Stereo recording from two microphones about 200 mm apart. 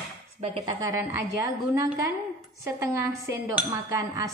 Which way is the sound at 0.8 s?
15° right (ahead or behind).